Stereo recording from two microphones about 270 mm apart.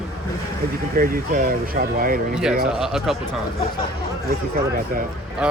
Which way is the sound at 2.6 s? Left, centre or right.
Centre.